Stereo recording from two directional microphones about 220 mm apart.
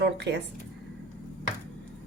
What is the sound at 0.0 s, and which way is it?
Speech, 50° right (ahead or behind).